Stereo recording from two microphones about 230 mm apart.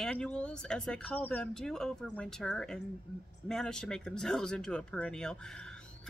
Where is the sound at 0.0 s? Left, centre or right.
Centre.